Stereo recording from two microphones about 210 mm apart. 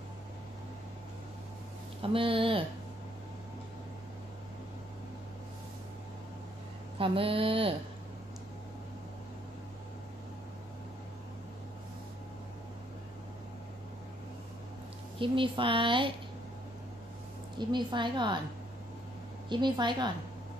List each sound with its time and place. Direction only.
2.0 s speech: 25° right (ahead or behind)
7.0 s speech: 25° right (ahead or behind)
15.1 s speech: 25° right (ahead or behind)
17.6 s speech: 20° right (ahead or behind)
19.5 s speech: 20° right (ahead or behind)